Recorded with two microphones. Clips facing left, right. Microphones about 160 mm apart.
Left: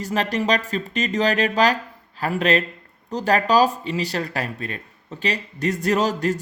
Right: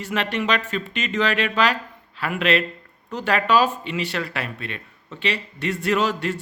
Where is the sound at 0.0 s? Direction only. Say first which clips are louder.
Left 2 dB; 40° left (ahead or behind).